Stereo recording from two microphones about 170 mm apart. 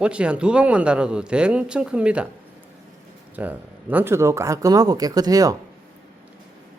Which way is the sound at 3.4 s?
10° right (ahead or behind).